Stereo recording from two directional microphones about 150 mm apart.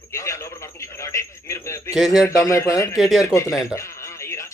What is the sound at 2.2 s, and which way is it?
Speech, 20° left (ahead or behind).